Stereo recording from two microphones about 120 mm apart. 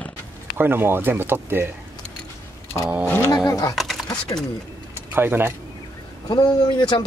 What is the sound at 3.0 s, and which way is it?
Roaring cats, 20° left (ahead or behind).